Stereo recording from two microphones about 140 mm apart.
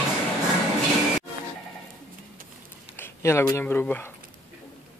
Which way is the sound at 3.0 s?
20° left (ahead or behind).